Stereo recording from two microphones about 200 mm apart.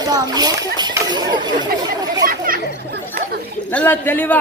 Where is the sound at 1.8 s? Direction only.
20° right (ahead or behind).